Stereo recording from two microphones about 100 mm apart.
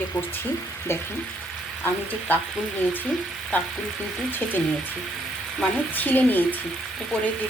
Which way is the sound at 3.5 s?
20° left (ahead or behind).